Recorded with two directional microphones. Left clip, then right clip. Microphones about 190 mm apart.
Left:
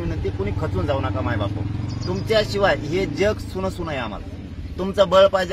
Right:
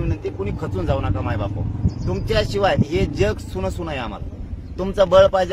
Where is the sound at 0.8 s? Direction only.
20° right (ahead or behind).